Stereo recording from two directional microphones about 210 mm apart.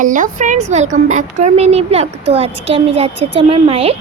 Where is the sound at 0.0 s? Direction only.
40° right (ahead or behind).